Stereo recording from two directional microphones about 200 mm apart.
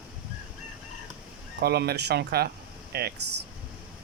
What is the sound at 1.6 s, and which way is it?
Speech, 55° right (ahead or behind).